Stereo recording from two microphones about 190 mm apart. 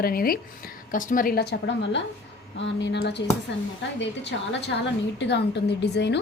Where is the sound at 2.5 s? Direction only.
70° left (ahead or behind).